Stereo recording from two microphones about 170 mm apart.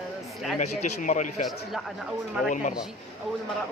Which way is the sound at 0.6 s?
45° left (ahead or behind).